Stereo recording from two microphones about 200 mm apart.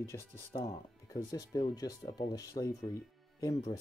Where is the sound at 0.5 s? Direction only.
20° left (ahead or behind).